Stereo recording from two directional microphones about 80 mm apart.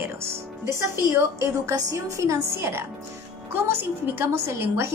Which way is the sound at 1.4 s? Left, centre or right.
Right.